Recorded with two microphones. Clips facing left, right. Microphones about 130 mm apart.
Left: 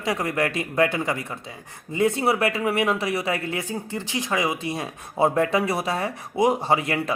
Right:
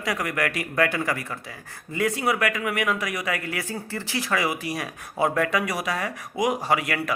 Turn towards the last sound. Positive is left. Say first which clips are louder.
# left 2 dB
turn(degrees=25)  # may be behind; listen again after turning